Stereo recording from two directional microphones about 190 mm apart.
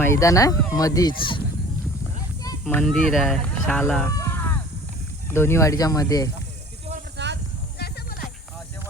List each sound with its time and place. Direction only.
0.0 s speech: 15° left (ahead or behind)
2.6 s speech: 10° left (ahead or behind)
4.2 s a sound: 10° left (ahead or behind)
5.3 s speech: 15° left (ahead or behind)
7.2 s snake: 65° right (ahead or behind)
7.8 s music: 55° left (ahead or behind)